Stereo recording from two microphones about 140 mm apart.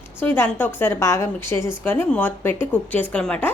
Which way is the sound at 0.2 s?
15° left (ahead or behind).